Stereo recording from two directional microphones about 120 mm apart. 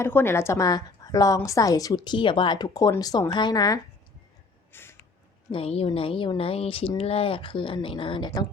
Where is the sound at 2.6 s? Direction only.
30° left (ahead or behind).